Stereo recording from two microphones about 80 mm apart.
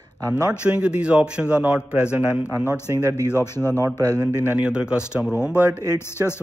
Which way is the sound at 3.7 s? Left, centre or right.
Right.